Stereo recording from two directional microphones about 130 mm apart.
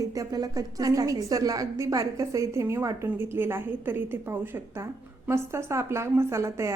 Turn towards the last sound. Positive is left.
turn(degrees=-20)  # may be behind; listen again after turning